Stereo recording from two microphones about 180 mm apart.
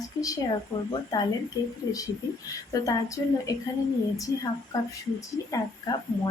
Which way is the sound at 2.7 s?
20° left (ahead or behind).